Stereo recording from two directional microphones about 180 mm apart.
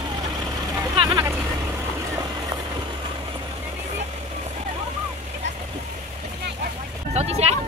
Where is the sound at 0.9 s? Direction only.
25° right (ahead or behind).